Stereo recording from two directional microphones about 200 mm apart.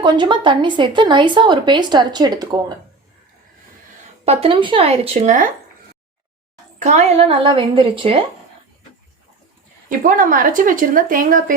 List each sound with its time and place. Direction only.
0.0 s speech: 25° right (ahead or behind)
4.3 s speech: 30° right (ahead or behind)
6.7 s speech: 35° right (ahead or behind)
10.0 s speech: 40° right (ahead or behind)